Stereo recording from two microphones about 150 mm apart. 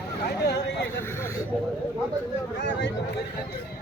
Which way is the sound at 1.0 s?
15° left (ahead or behind).